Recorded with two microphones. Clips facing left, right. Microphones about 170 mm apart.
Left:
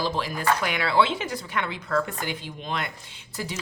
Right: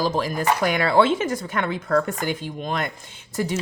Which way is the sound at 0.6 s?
45° right (ahead or behind).